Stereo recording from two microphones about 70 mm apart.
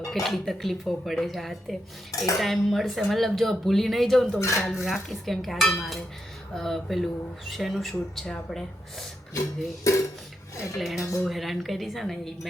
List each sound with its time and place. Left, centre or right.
0.1 s speech: centre
2.1 s cutlery: left
2.4 s speech: centre
4.4 s dishes: left
4.7 s speech: centre
9.9 s dishes: left
10.8 s speech: centre